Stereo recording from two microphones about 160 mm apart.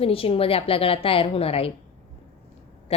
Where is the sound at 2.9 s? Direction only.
40° left (ahead or behind).